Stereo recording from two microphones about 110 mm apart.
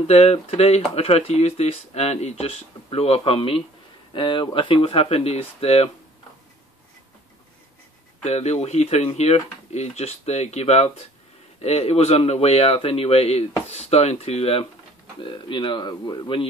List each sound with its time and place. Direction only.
0.0 s speech: 80° left; by 3.6 s 60° left (ahead or behind)
4.1 s speech: 45° left (ahead or behind)
4.6 s speech: 55° left (ahead or behind)
8.2 s speech: 75° left (ahead or behind)
15.2 s speech: 50° left (ahead or behind)